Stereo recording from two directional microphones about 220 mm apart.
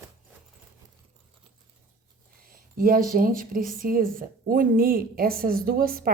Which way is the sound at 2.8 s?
40° right (ahead or behind).